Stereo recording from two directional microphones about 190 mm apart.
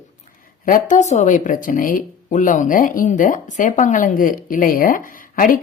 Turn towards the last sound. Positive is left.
turn(degrees=45)  # may be behind; listen again after turning